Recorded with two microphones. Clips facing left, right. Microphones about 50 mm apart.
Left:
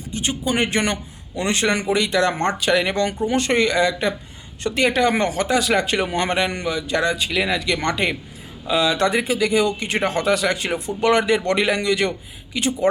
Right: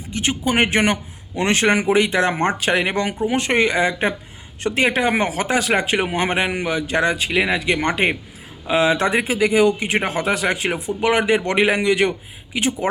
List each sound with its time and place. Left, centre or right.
0.1 s speech: right
2.3 s speech: centre
2.6 s speech: right
5.5 s speech: right
6.7 s speech: right
8.0 s speech: right